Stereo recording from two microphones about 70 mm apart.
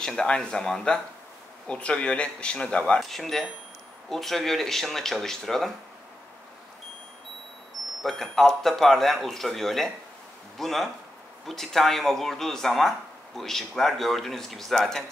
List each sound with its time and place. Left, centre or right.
0.0 s speech: centre
3.0 s speech: centre
8.0 s speech: centre